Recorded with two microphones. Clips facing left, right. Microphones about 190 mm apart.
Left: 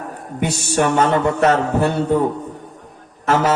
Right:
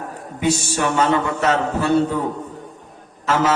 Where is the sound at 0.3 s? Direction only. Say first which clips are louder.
Left 1 dB; 60° left (ahead or behind).